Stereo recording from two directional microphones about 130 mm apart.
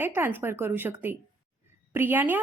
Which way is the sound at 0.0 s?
15° right (ahead or behind).